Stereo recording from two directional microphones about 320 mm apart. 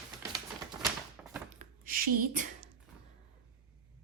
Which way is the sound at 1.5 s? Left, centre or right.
Right.